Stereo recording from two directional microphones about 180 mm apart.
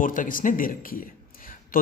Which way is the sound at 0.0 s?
50° left (ahead or behind).